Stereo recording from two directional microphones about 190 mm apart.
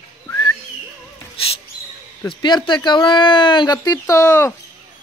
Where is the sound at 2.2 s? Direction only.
25° left (ahead or behind).